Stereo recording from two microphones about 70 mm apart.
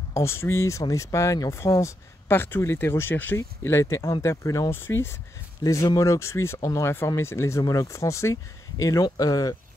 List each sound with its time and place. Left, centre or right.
0.1 s speech: left
2.2 s speech: left
4.6 s speech: left
5.6 s speech: left
5.9 s speech: left
7.6 s speech: left
8.8 s speech: left